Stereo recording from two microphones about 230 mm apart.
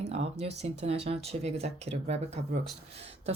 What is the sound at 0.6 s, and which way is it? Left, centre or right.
Speech, right.